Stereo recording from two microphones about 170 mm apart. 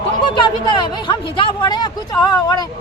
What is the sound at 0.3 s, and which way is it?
Speech, 25° left (ahead or behind).